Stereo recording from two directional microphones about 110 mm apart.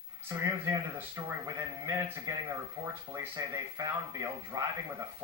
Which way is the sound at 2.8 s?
45° right (ahead or behind).